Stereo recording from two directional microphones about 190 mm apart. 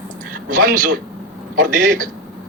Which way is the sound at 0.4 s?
45° right (ahead or behind).